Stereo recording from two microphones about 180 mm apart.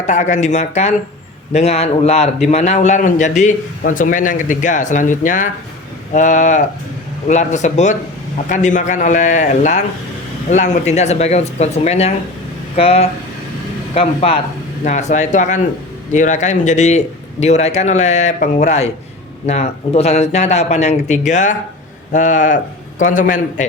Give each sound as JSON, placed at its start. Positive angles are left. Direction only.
{"t": 0.0, "sound": "a man's voice", "side_deg": 40}